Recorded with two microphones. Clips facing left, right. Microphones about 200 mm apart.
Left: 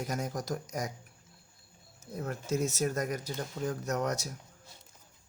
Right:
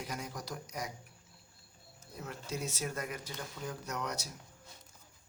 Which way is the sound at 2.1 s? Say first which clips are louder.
Left 8 dB; 50° left (ahead or behind).